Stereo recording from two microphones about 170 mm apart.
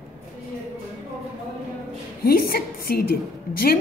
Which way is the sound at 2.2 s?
60° left (ahead or behind).